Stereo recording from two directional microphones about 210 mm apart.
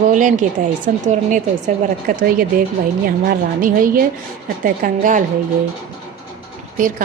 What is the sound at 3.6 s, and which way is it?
A woman's voice, 40° right (ahead or behind).